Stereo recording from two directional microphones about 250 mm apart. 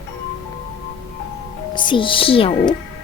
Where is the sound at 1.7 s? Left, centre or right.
Centre.